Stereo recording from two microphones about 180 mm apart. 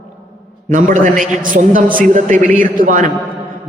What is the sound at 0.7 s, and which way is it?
A man's voice, 45° right (ahead or behind).